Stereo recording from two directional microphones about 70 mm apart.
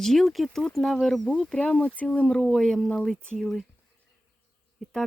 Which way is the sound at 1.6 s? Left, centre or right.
Centre.